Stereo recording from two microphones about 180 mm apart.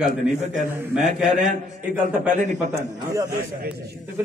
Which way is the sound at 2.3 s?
45° right (ahead or behind).